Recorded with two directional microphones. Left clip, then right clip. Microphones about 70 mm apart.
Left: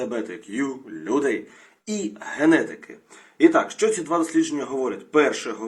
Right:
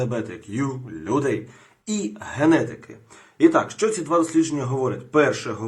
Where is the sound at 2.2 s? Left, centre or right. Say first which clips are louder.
Even; right.